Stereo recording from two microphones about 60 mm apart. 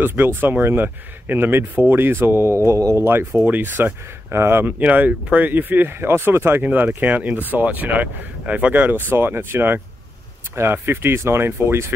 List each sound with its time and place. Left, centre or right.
0.0 s speech: right
3.4 s speech: right
4.3 s speech: right
4.6 s speech: right
6.6 s speech: right
8.9 s speech: right